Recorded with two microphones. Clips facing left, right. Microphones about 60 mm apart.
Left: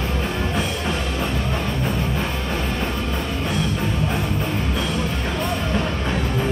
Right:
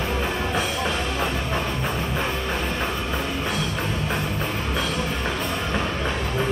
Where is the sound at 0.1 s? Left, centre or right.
Centre.